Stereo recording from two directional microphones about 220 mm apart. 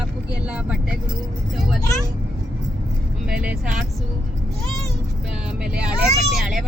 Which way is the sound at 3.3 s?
5° right (ahead or behind).